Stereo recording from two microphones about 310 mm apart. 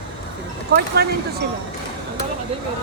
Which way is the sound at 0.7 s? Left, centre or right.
Right.